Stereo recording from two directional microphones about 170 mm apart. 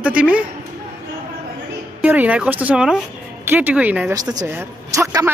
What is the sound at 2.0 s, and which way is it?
Speech, 10° right (ahead or behind).